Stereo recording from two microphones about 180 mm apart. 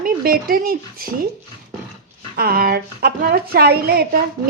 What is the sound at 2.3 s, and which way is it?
A woman's voice, 55° right (ahead or behind).